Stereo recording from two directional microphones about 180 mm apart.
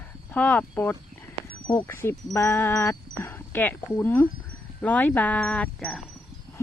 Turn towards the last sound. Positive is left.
turn(degrees=5)  # may be behind; listen again after turning